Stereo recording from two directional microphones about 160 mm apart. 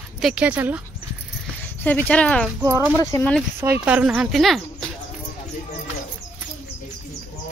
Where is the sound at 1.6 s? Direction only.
10° left (ahead or behind).